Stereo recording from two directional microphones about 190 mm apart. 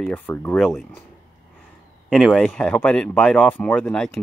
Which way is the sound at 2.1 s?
5° left (ahead or behind).